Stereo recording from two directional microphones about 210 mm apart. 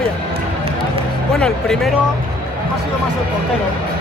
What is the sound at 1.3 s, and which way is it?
Speech, 5° left (ahead or behind).